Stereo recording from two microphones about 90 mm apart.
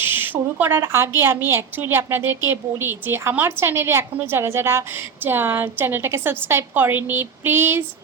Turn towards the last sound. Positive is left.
turn(degrees=-25)  # may be behind; listen again after turning